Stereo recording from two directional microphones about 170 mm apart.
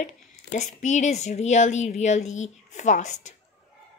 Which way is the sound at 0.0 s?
45° left (ahead or behind).